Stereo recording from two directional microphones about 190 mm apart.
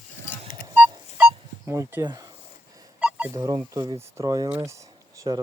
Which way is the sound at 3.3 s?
20° right (ahead or behind).